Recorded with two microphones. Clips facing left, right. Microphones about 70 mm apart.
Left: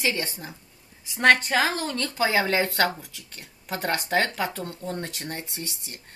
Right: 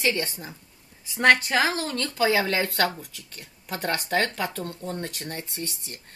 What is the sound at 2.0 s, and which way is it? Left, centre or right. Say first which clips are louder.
Speech: right 1 dB; left.